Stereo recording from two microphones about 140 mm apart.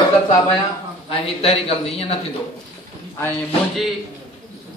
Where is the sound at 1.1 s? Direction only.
45° left (ahead or behind).